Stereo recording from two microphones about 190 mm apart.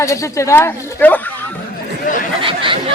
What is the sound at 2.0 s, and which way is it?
Speech, 45° left (ahead or behind).